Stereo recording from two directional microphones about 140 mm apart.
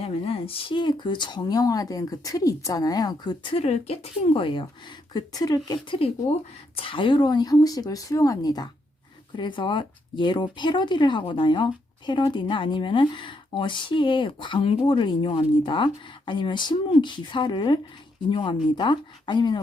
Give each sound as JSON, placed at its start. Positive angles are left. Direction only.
{"t": 0.0, "sound": "speech", "side_deg": 45}
{"t": 5.1, "sound": "speech", "side_deg": 25}
{"t": 6.7, "sound": "speech", "side_deg": 40}